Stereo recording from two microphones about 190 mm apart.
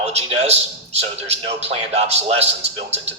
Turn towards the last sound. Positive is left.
turn(degrees=-35)  # may be behind; listen again after turning